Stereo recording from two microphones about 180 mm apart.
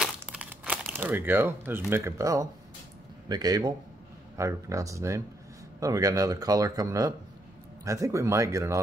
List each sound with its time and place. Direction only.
0.0 s crumpling: 5° right (ahead or behind)
3.3 s speech: 20° right (ahead or behind)